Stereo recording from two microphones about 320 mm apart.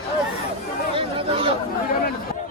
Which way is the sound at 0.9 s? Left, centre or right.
Centre.